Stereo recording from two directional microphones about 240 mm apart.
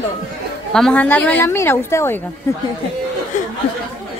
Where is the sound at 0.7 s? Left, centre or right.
Centre.